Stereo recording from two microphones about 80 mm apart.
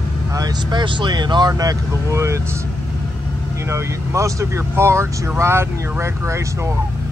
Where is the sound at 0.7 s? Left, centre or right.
Right.